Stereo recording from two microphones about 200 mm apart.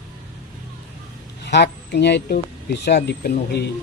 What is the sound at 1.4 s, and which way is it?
Speech, 55° left (ahead or behind).